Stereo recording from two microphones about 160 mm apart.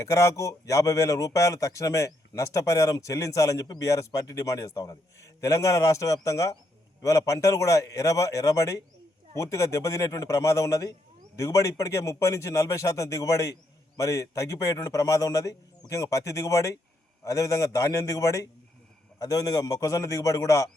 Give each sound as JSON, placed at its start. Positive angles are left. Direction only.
{"t": 0.0, "sound": "speech", "side_deg": 20}